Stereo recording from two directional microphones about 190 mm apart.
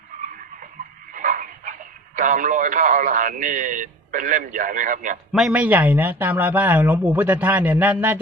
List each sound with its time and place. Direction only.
1.1 s dog: 45° right (ahead or behind)
2.1 s speech: 40° right (ahead or behind)
5.3 s speech: centre (ahead or behind)